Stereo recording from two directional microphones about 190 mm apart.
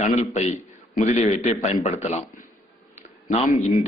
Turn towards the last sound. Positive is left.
turn(degrees=35)  # may be behind; listen again after turning